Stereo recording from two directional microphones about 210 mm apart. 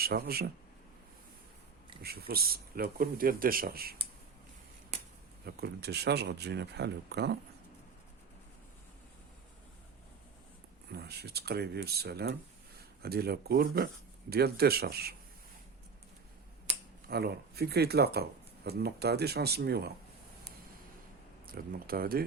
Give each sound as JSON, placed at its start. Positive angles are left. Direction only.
{"t": 0.0, "sound": "speech", "side_deg": -45}
{"t": 2.0, "sound": "speech", "side_deg": -45}
{"t": 5.5, "sound": "speech", "side_deg": -50}
{"t": 10.9, "sound": "speech", "side_deg": -50}
{"t": 17.1, "sound": "speech", "side_deg": -50}
{"t": 21.4, "sound": "speech", "side_deg": -45}